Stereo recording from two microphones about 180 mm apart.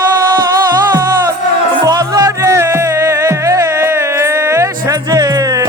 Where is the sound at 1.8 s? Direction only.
20° right (ahead or behind).